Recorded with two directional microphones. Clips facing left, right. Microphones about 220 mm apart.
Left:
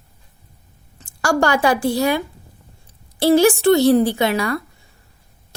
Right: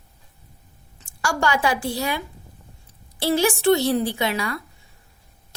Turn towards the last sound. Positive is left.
turn(degrees=45)  # may be behind; listen again after turning